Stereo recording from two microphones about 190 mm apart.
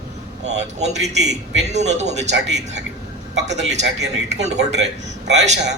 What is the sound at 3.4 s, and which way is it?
A man's voice, 35° right (ahead or behind).